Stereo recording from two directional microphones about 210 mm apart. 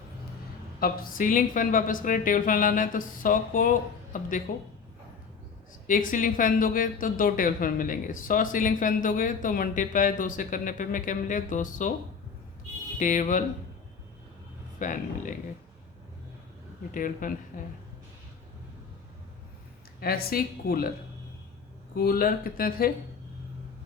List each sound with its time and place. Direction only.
0.8 s speech: 40° left (ahead or behind)
5.9 s speech: 40° left (ahead or behind)
13.0 s speech: 35° left (ahead or behind)
14.8 s speech: 40° left (ahead or behind)
16.9 s speech: 40° left (ahead or behind)
20.0 s a woman's voice: 45° left (ahead or behind)
21.9 s a woman's voice: 45° left (ahead or behind)